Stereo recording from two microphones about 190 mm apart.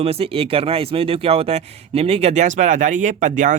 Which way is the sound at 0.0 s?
30° right (ahead or behind).